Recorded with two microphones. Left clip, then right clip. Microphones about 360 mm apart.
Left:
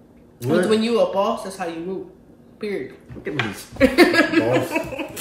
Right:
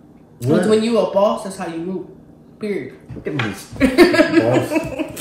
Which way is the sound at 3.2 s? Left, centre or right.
Centre.